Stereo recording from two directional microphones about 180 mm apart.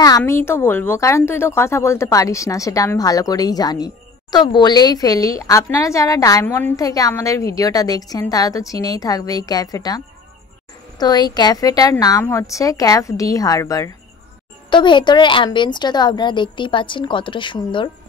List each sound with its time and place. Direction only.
0.2 s a woman's voice: 15° left (ahead or behind)